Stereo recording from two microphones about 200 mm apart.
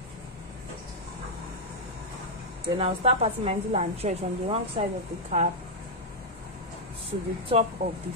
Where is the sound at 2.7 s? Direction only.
30° right (ahead or behind).